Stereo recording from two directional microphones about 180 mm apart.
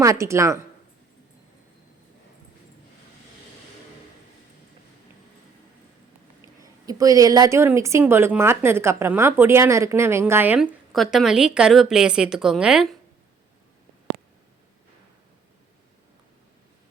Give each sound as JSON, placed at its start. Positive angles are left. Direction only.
{"t": 0.0, "sound": "a woman's voice", "side_deg": -15}
{"t": 6.6, "sound": "a woman's voice", "side_deg": -20}